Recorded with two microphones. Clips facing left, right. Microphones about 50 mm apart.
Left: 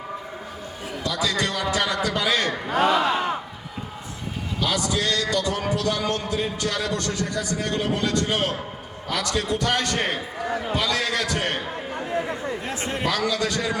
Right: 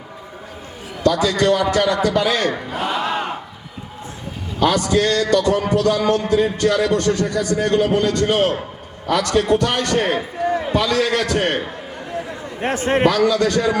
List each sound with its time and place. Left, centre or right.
1.0 s a man's voice: right
2.6 s battle cry: left
4.6 s a man's voice: right
12.6 s a man's voice: right